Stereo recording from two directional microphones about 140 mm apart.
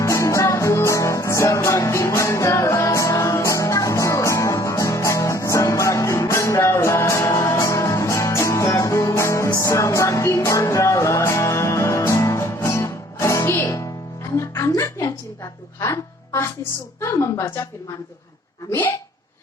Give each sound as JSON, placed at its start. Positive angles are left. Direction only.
{"t": 0.0, "sound": "music", "side_deg": 20}
{"t": 17.0, "sound": "a woman's voice", "side_deg": 20}
{"t": 18.7, "sound": "speech", "side_deg": 15}